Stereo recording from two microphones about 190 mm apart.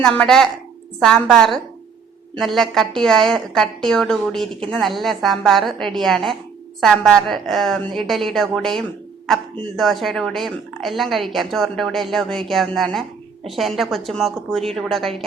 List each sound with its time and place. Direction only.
0.0 s speech: 5° left (ahead or behind)